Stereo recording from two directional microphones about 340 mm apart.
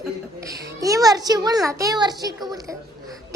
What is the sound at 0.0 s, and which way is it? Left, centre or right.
A woman's voice, centre.